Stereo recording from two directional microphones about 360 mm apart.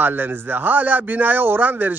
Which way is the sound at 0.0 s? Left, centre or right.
Centre.